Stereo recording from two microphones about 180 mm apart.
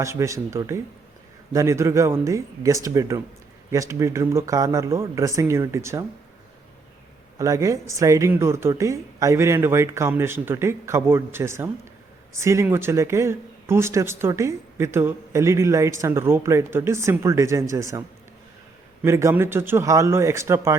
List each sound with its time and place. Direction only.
0.0 s speech: 15° right (ahead or behind)
7.3 s speech: 20° right (ahead or behind)
19.0 s speech: 15° right (ahead or behind)